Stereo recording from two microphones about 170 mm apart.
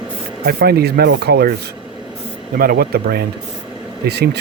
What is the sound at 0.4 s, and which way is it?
Speech, 70° right (ahead or behind).